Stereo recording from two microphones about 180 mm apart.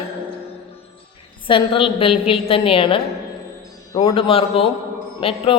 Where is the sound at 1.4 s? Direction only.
30° left (ahead or behind).